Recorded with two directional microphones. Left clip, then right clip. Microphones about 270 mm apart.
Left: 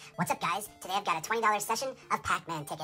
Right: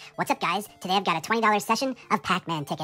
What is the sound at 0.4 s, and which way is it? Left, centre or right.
Speech, centre.